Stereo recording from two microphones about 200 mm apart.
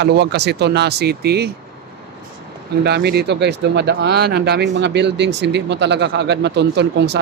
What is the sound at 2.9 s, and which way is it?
Speech, 55° right (ahead or behind).